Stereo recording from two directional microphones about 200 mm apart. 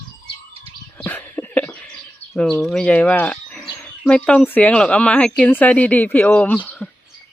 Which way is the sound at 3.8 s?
5° left (ahead or behind).